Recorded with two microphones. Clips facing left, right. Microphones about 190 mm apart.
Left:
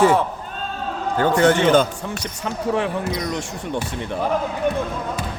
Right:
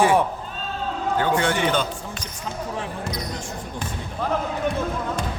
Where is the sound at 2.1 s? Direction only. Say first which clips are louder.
Left 5 dB; 70° left (ahead or behind).